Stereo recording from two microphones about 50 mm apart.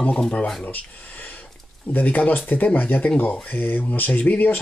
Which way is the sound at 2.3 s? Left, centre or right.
Left.